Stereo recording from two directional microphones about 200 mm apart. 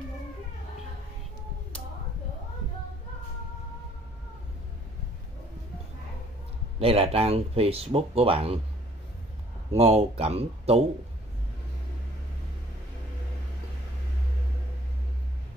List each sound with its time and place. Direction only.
6.8 s speech: 30° right (ahead or behind)
9.7 s speech: 30° right (ahead or behind)